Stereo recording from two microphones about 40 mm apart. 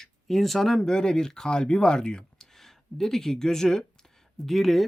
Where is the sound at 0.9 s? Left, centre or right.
Centre.